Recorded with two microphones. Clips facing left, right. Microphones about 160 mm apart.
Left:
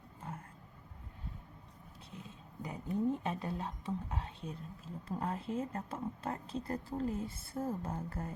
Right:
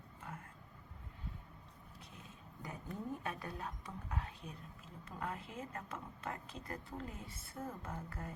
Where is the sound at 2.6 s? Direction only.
20° left (ahead or behind); by 8.3 s 40° left (ahead or behind).